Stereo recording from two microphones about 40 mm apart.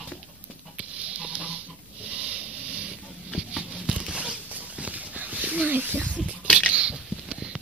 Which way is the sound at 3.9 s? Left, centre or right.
Right.